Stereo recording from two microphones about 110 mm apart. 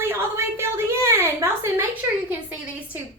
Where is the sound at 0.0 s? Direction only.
25° right (ahead or behind).